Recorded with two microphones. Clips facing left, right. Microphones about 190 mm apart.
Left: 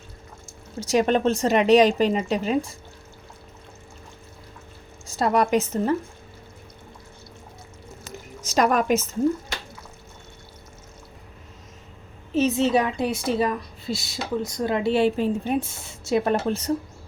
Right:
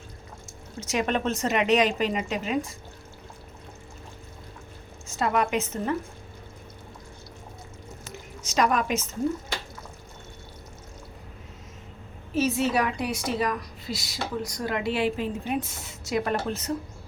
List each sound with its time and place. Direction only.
0.8 s speech: 35° left (ahead or behind)
5.0 s speech: 35° left (ahead or behind)
8.5 s a woman's voice: 45° left (ahead or behind)
12.4 s a woman's voice: 25° left (ahead or behind)